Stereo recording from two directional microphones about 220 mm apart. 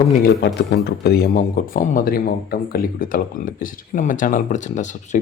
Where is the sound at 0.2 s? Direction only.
45° left (ahead or behind).